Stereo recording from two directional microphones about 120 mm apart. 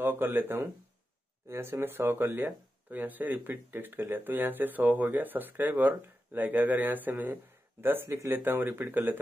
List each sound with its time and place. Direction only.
0.0 s speech: 20° right (ahead or behind)